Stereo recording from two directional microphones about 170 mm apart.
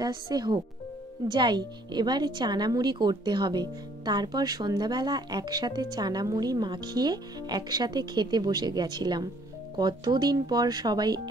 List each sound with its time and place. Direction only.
0.0 s speech: 25° right (ahead or behind)